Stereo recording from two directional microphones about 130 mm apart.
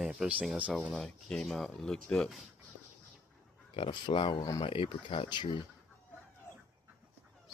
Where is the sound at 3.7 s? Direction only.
40° left (ahead or behind).